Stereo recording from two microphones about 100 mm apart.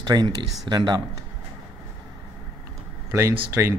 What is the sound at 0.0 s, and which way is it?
Speech, 45° right (ahead or behind).